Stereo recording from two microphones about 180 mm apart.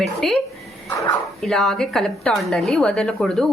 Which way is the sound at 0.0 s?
Centre (ahead or behind).